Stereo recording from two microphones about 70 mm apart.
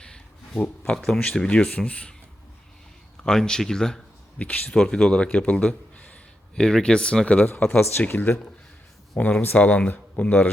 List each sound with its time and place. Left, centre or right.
0.0 s a sound: centre
0.9 s speech: centre
3.2 s speech: centre
4.4 s a man's voice: centre